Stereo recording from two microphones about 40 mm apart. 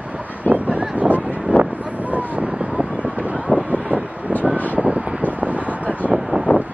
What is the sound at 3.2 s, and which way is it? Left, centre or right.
Wind noise, right.